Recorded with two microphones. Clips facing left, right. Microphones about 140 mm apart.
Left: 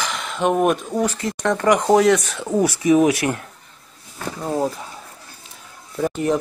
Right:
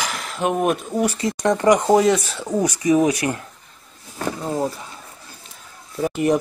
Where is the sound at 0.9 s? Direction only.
10° right (ahead or behind).